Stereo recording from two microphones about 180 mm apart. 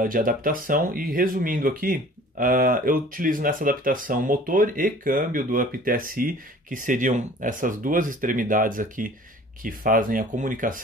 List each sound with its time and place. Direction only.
0.0 s speech: 50° right (ahead or behind)